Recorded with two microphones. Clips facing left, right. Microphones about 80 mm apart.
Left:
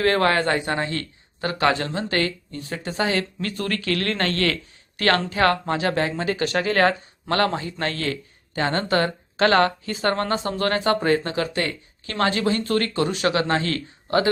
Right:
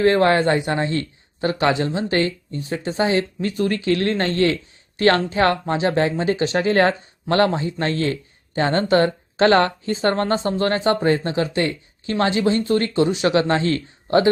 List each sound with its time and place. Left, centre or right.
0.2 s speech: right
13.3 s speech: right